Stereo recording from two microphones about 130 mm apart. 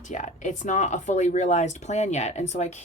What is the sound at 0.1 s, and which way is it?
A woman's voice, 70° left (ahead or behind).